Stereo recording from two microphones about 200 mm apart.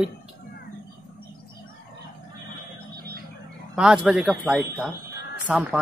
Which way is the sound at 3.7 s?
5° right (ahead or behind).